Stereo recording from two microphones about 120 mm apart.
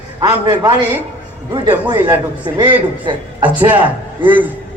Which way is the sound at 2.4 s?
40° right (ahead or behind).